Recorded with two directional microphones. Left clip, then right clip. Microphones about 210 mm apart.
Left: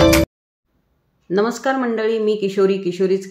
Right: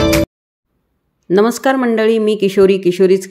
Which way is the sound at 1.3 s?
45° right (ahead or behind).